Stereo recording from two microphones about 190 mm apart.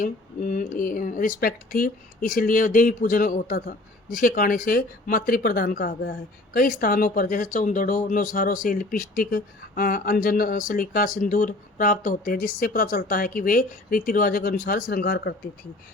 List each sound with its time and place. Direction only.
0.0 s speech: 45° left (ahead or behind)